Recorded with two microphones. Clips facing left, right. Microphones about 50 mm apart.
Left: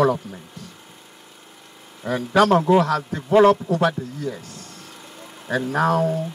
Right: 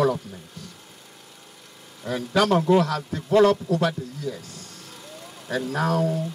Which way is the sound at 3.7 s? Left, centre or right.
Left.